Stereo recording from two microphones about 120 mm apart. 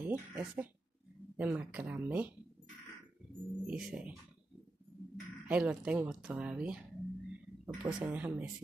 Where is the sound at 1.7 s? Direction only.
15° right (ahead or behind).